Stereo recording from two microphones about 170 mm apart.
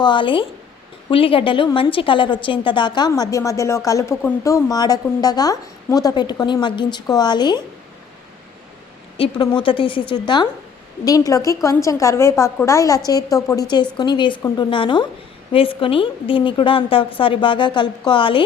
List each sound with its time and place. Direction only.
0.0 s a woman's voice: 30° left (ahead or behind)
9.1 s a woman's voice: 30° left (ahead or behind)